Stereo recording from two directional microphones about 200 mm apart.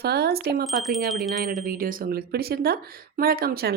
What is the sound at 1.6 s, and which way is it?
Speech, 45° right (ahead or behind).